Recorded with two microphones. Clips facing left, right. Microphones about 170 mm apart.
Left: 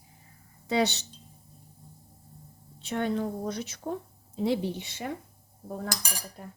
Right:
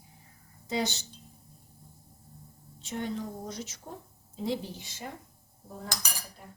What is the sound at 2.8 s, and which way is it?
A woman's voice, 65° left (ahead or behind).